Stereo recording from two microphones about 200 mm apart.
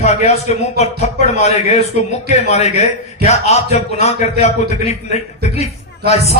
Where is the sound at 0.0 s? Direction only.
35° left (ahead or behind).